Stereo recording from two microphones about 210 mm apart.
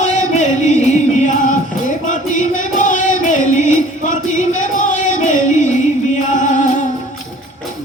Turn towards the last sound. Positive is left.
turn(degrees=35)  # may be behind; listen again after turning